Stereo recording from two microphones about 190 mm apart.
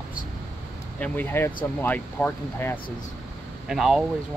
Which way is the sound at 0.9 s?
10° left (ahead or behind).